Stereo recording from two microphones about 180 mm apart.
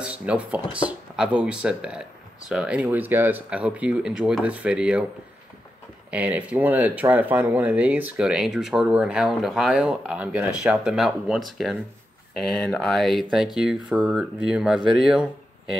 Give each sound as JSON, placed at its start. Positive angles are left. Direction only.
{"t": 0.0, "sound": "a sound", "side_deg": -5}
{"t": 0.7, "sound": "speech", "side_deg": -5}
{"t": 6.0, "sound": "speech", "side_deg": -10}